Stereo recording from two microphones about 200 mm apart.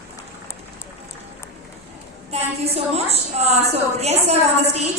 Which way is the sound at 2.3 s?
30° right (ahead or behind).